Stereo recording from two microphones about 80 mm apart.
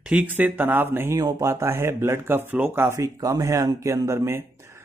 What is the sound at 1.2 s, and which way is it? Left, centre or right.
Speech, right.